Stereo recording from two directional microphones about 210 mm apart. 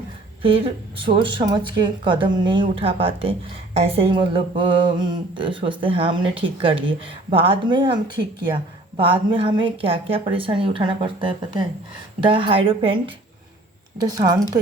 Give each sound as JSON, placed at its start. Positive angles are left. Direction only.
{"t": 0.4, "sound": "speech", "side_deg": -25}
{"t": 9.0, "sound": "speech", "side_deg": -25}